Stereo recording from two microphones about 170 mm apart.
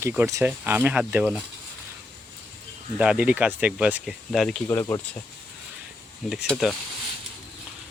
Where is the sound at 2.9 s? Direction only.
5° right (ahead or behind).